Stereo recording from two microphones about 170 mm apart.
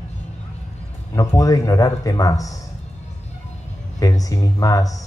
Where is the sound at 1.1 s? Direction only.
20° left (ahead or behind).